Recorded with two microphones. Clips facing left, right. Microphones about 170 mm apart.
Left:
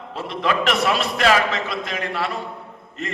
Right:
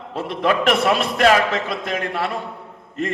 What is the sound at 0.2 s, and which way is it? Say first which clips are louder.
A man's voice: right 3 dB; 55° right (ahead or behind).